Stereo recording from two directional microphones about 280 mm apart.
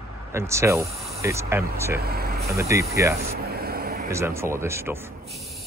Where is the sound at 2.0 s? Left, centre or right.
Right.